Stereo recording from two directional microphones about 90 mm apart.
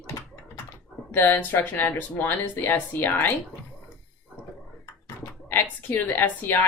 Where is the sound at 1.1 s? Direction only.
20° left (ahead or behind).